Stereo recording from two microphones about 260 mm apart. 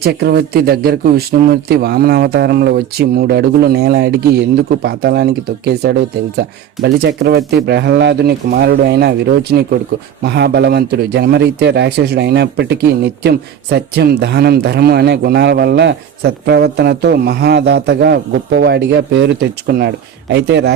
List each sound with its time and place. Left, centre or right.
0.0 s a man's voice: right
10.2 s a man's voice: right